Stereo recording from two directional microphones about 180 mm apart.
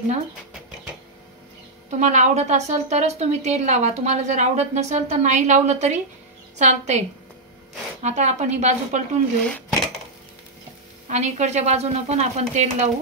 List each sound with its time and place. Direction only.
1.9 s a woman's voice: 40° right (ahead or behind)
8.0 s a woman's voice: 40° right (ahead or behind)
9.4 s dishes: 5° left (ahead or behind)
11.1 s a woman's voice: 40° right (ahead or behind)